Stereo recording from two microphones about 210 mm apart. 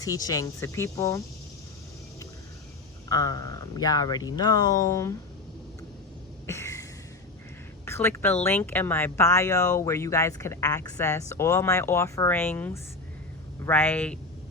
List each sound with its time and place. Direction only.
0.0 s speech: 15° left (ahead or behind)
3.1 s speech: 15° left (ahead or behind)
6.5 s a sound: 15° left (ahead or behind)
7.9 s speech: 10° left (ahead or behind)